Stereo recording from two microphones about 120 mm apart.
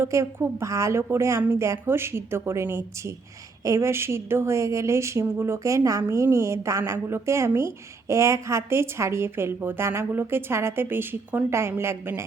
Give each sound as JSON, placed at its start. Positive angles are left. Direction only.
{"t": 0.0, "sound": "a woman's voice", "side_deg": -20}